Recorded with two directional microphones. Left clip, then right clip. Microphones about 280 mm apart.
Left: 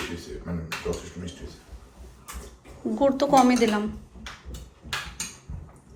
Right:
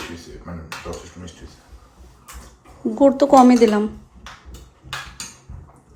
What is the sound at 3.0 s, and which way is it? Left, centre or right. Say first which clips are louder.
Speech: right 7 dB; centre.